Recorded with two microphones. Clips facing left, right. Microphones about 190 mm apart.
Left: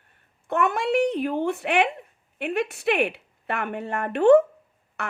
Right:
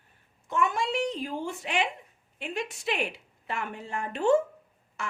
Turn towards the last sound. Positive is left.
turn(degrees=60)  # may be behind; listen again after turning